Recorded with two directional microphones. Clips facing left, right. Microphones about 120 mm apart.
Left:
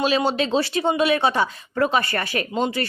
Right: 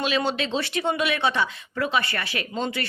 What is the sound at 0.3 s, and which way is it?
Speech, 35° left (ahead or behind).